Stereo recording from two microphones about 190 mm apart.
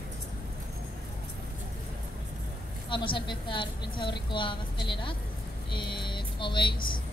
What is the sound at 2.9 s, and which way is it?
A woman's voice, 25° left (ahead or behind).